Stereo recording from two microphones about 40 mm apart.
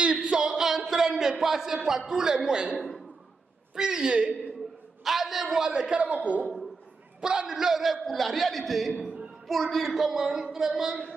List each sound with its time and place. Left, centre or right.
0.0 s music: right
0.5 s a sound: centre
1.4 s a woman's voice: centre
5.0 s a man's voice: centre
5.7 s a woman's voice: right
5.9 s a man's voice: right
7.2 s a man's voice: right